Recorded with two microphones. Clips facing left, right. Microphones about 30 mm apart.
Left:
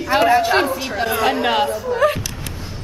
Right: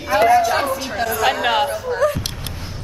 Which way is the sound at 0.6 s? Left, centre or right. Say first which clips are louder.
Even; centre.